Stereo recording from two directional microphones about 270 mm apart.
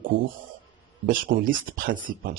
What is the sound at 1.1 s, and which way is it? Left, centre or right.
Speech, right.